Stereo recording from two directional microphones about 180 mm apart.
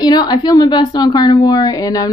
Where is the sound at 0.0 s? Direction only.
20° left (ahead or behind).